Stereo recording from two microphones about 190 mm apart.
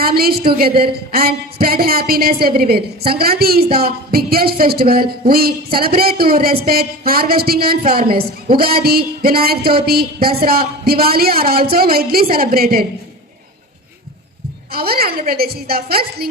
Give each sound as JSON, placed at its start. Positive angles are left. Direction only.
{"t": 0.0, "sound": "speech", "side_deg": -55}
{"t": 14.7, "sound": "speech", "side_deg": -55}